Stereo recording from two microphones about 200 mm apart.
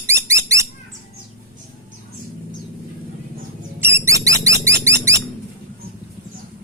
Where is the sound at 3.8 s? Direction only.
15° right (ahead or behind).